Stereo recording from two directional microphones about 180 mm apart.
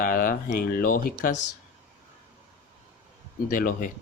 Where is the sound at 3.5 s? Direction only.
50° left (ahead or behind).